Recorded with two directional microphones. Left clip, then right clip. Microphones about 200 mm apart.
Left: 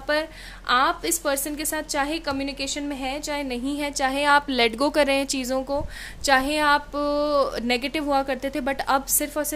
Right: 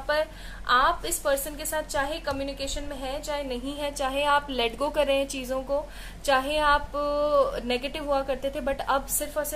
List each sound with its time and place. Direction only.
0.1 s a woman's voice: 55° left (ahead or behind)